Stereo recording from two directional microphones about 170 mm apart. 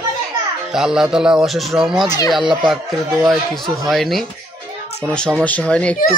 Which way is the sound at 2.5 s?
Centre (ahead or behind).